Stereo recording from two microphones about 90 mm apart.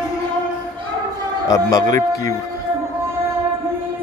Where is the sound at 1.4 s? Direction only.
45° left (ahead or behind).